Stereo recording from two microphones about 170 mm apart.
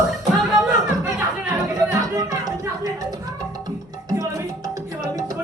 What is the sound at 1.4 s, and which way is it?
Music, 15° right (ahead or behind).